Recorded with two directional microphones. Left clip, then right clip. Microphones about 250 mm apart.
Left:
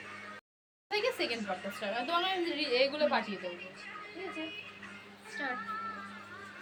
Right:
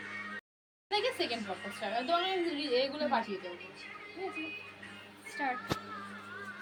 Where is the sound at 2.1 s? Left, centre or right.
Left.